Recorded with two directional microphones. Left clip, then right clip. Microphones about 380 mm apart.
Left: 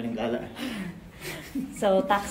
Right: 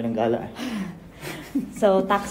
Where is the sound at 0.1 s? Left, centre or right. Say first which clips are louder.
Right 7 dB; centre.